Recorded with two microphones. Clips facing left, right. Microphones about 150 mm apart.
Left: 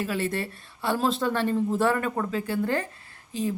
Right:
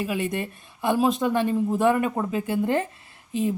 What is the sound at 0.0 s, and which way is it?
Speech, 15° right (ahead or behind).